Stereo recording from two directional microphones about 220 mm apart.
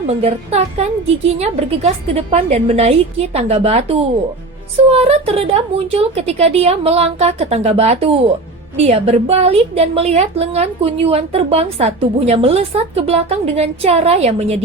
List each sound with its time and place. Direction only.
0.1 s a woman's voice: 30° right (ahead or behind)